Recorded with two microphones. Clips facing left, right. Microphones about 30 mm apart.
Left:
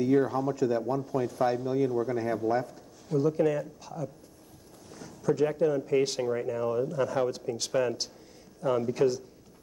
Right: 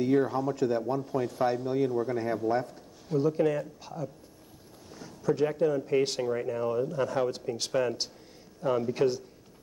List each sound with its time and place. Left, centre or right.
0.2 s a man's voice: centre
4.9 s a sound: centre
5.5 s a man's voice: centre
8.9 s a man's voice: right